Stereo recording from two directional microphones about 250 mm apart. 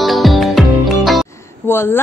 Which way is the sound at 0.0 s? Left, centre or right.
Centre.